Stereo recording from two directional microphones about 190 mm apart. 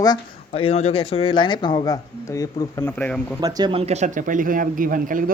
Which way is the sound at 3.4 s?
20° right (ahead or behind).